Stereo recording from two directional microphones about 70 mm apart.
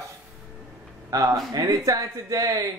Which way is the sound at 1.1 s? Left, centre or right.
Right.